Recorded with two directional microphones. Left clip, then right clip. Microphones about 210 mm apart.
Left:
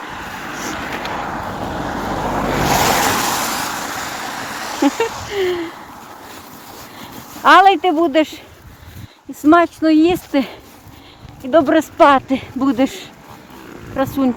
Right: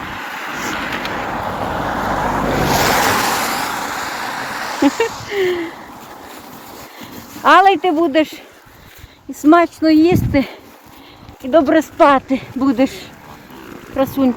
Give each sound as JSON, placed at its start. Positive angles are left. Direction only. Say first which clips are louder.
{"t": 0.0, "sound": "vehicle", "louder": "right 2 dB", "side_deg": -20}
{"t": 0.9, "sound": "a sound", "louder": "right 1 dB", "side_deg": -50}
{"t": 1.4, "sound": "vehicle", "louder": "right 3 dB", "side_deg": -30}
{"t": 2.5, "sound": "vehicle", "louder": "left 3 dB", "side_deg": 25}
{"t": 2.7, "sound": "vehicle", "louder": "right 1 dB", "side_deg": 50}
{"t": 5.3, "sound": "a sound", "louder": "right 1 dB", "side_deg": 0}
{"t": 7.0, "sound": "speech", "louder": "left 1 dB", "side_deg": 0}
{"t": 9.5, "sound": "speech", "louder": "right 1 dB", "side_deg": -10}
{"t": 13.9, "sound": "speech", "louder": "right 2 dB", "side_deg": -5}